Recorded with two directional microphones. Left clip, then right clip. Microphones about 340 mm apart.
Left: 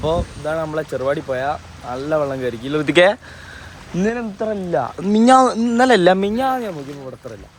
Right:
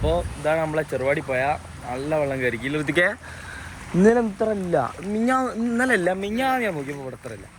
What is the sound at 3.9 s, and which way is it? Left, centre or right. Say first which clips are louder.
Speech: right 4 dB; centre.